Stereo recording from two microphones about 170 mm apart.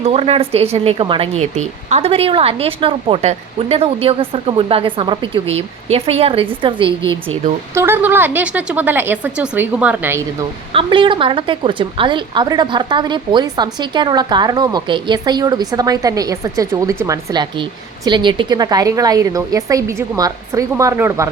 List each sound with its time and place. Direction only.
0.0 s speech: 35° right (ahead or behind)
7.8 s speech: 15° right (ahead or behind)
10.8 s a woman's voice: 30° right (ahead or behind)